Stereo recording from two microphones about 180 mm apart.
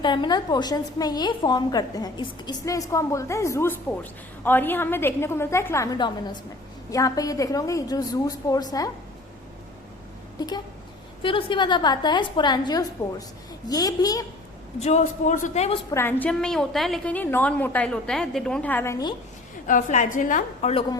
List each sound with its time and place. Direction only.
0.0 s a woman's voice: 25° left (ahead or behind)
11.2 s a woman's voice: 30° left (ahead or behind)
14.8 s a man's voice: 40° left (ahead or behind)
15.9 s a woman's voice: 15° left (ahead or behind)
19.6 s a woman's voice: 45° left (ahead or behind)